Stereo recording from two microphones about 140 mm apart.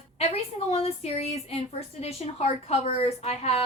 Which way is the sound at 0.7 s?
45° left (ahead or behind).